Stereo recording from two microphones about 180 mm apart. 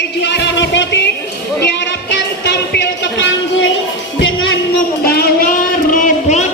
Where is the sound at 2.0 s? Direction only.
70° left (ahead or behind); by 3.7 s 90° left.